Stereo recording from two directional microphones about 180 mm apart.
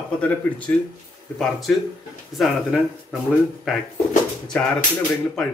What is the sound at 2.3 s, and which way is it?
Speech, centre (ahead or behind).